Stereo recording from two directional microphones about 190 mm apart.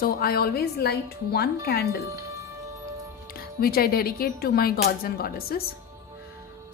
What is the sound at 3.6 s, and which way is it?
A woman's voice, 50° left (ahead or behind).